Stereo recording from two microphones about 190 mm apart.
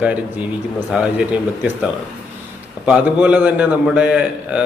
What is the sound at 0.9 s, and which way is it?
Speech, 5° right (ahead or behind).